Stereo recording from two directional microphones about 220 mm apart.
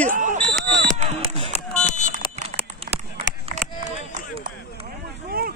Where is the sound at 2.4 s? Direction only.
25° right (ahead or behind).